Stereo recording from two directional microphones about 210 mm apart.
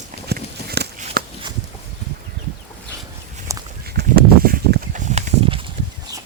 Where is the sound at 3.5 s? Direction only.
15° right (ahead or behind).